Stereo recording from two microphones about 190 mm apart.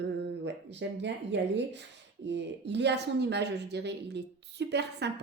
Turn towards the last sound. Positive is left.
turn(degrees=-65)  # may be behind; listen again after turning